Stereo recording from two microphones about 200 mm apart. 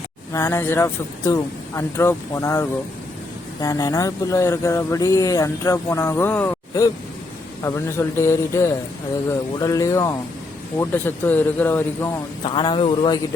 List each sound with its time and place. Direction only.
0.3 s speech: 15° left (ahead or behind)
12.4 s a man's voice: 25° left (ahead or behind)